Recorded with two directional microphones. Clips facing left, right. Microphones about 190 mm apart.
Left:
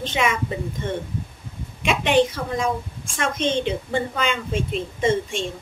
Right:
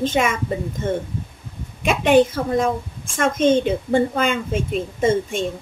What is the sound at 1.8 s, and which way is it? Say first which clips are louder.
A woman's voice: right 4 dB; 45° right (ahead or behind).